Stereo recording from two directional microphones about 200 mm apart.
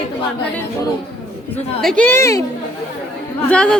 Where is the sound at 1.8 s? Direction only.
5° left (ahead or behind).